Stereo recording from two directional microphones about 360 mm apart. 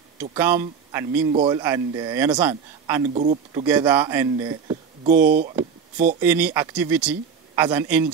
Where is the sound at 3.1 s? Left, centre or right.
Centre.